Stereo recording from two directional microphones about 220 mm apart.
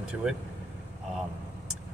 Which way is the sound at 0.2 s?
5° right (ahead or behind).